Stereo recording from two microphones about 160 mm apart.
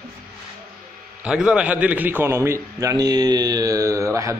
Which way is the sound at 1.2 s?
5° right (ahead or behind).